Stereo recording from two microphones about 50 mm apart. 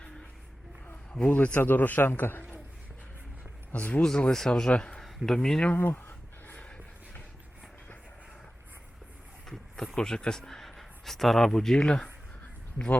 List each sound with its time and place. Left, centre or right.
1.1 s a man's voice: left
1.5 s a man's voice: left
3.7 s speech: left
4.0 s speech: centre
5.0 s speech: centre
5.7 s a sound: left
6.6 s a sound: left
9.5 s speech: centre